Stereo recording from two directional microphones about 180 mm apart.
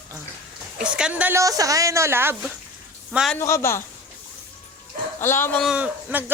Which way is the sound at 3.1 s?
Centre (ahead or behind).